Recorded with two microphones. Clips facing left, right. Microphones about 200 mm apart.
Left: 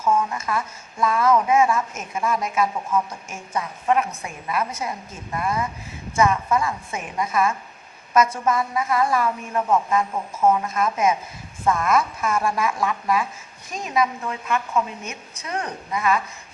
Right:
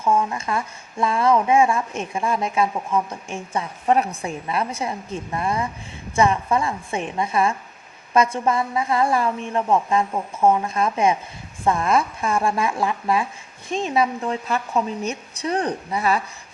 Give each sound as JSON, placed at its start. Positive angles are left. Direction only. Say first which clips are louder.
{"t": 0.0, "sound": "speech", "louder": "right 1 dB", "side_deg": -10}
{"t": 0.3, "sound": "a woman's voice", "louder": "right 1 dB", "side_deg": -25}